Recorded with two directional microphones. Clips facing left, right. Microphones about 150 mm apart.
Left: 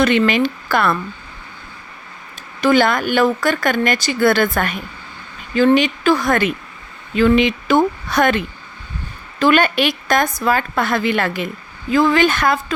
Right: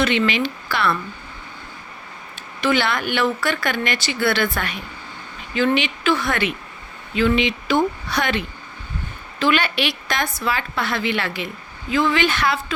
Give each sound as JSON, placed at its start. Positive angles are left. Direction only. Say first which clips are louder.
{"t": 0.0, "sound": "speech", "louder": "left 5 dB", "side_deg": 45}
{"t": 2.6, "sound": "speech", "louder": "left 6 dB", "side_deg": 45}